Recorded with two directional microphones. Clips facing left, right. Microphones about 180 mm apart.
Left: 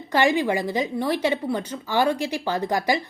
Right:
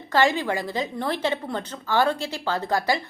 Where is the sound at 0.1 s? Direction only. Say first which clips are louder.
Left 1 dB; 15° left (ahead or behind).